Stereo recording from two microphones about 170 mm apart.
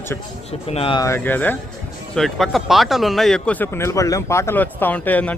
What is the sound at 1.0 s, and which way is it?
Speech, 15° left (ahead or behind).